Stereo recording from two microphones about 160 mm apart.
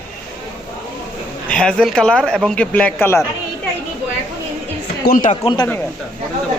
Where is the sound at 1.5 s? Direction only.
5° left (ahead or behind).